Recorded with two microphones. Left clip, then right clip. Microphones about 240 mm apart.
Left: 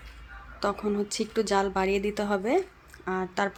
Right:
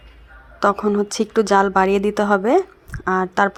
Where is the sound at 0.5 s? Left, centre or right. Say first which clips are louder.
Right 11 dB; right.